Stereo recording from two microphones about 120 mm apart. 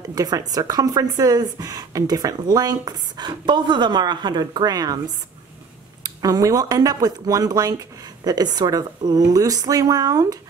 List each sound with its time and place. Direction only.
0.1 s speech: 30° right (ahead or behind)